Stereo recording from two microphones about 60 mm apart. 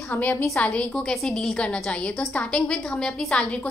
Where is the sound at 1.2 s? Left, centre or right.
Centre.